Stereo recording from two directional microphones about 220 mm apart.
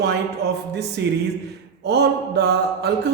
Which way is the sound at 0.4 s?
50° right (ahead or behind).